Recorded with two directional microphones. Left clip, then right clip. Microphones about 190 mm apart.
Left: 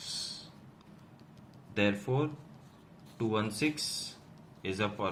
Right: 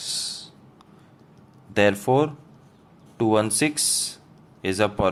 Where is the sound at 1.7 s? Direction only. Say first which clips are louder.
Right 12 dB; 60° right (ahead or behind).